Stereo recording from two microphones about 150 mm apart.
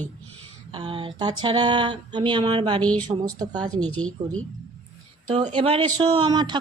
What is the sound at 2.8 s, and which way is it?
Speech, 10° left (ahead or behind).